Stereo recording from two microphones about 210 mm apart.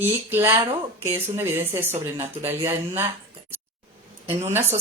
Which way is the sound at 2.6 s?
15° right (ahead or behind).